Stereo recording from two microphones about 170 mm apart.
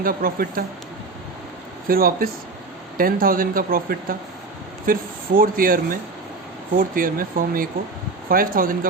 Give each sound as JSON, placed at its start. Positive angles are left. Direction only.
{"t": 0.0, "sound": "speech", "side_deg": -55}
{"t": 1.9, "sound": "speech", "side_deg": -60}